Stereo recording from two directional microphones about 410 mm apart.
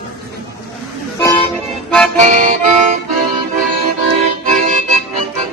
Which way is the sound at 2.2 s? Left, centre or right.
Centre.